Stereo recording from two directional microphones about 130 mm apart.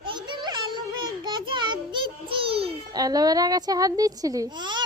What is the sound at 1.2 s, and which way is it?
Child singing, 35° right (ahead or behind).